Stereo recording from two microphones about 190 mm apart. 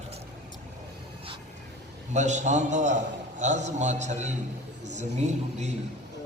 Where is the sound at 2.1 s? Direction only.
40° right (ahead or behind).